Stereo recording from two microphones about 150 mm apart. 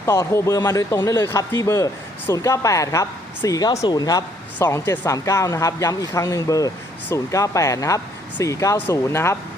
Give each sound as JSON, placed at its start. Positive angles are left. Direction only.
{"t": 0.0, "sound": "a woman's voice", "side_deg": 15}